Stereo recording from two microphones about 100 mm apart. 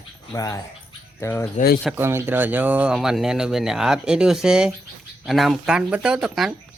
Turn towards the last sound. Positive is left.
turn(degrees=-5)  # may be behind; listen again after turning